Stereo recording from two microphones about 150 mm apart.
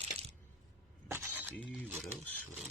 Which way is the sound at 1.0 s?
15° right (ahead or behind).